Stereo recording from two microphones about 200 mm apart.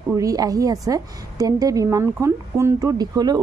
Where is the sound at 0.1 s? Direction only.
15° right (ahead or behind).